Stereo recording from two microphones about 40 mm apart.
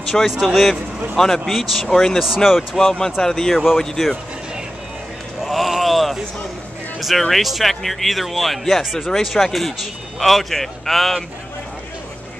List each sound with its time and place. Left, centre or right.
0.4 s speech: centre
1.1 s speech: centre
1.9 s speech: centre
2.2 s speech: centre
2.8 s speech: centre
5.4 s a sound: centre
7.0 s speech: centre